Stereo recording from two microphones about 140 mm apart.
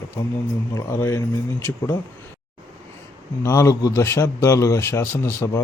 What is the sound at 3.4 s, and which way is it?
Speech, 20° left (ahead or behind).